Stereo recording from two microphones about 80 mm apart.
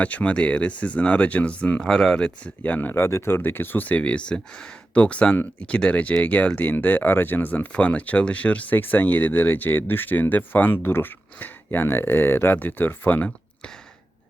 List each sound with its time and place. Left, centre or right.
0.0 s a man's voice: centre
1.8 s a man's voice: centre
2.9 s a man's voice: left